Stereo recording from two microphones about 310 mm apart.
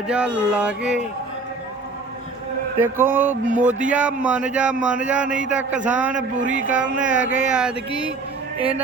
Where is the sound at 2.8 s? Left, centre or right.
Centre.